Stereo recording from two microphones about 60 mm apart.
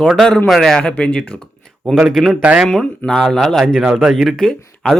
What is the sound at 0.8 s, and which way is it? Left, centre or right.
Speech, centre.